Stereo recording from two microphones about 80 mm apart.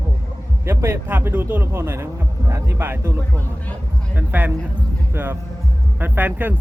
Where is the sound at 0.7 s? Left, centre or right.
Right.